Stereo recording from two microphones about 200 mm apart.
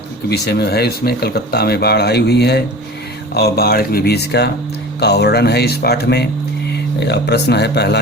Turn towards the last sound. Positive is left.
turn(degrees=55)  # may be behind; listen again after turning